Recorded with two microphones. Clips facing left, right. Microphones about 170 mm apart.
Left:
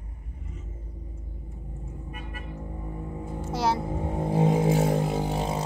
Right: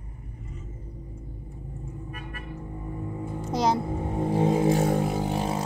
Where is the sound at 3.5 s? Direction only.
15° right (ahead or behind).